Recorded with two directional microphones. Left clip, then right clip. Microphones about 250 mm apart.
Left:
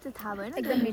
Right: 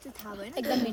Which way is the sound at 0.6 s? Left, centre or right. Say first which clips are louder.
Even; right.